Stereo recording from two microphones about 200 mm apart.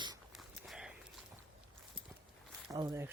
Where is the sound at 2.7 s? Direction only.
15° right (ahead or behind).